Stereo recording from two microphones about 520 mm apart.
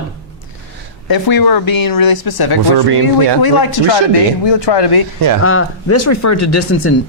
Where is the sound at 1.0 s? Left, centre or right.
Left.